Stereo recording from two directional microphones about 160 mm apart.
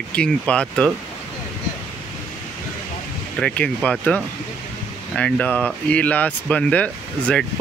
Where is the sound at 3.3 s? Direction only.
5° left (ahead or behind).